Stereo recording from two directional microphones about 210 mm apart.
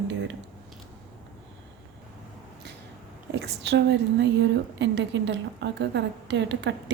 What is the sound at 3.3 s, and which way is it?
A woman's voice, 55° right (ahead or behind).